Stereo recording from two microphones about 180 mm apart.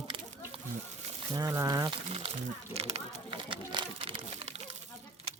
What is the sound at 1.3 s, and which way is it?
Speech, 20° right (ahead or behind).